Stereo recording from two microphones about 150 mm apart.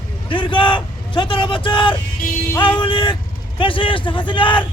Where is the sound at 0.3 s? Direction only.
35° left (ahead or behind).